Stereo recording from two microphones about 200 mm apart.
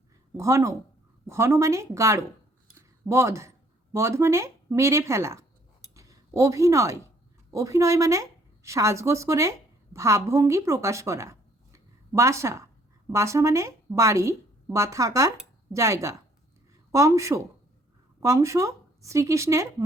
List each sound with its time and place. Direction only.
0.3 s a woman's voice: 15° right (ahead or behind)
2.7 s a sound: 15° right (ahead or behind)
3.9 s a woman's voice: 15° right (ahead or behind)